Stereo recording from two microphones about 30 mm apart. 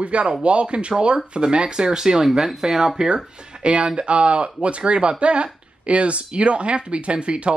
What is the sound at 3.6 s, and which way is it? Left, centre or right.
Speech, right.